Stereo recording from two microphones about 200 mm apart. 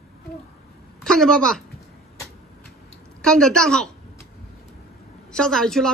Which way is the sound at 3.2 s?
5° left (ahead or behind).